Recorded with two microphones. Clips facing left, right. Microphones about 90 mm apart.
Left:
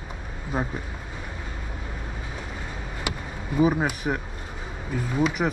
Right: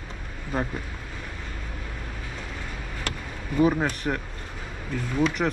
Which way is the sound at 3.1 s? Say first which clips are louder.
Left 2 dB; 10° left (ahead or behind).